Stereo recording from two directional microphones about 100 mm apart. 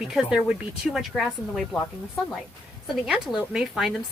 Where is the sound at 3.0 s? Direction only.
5° right (ahead or behind).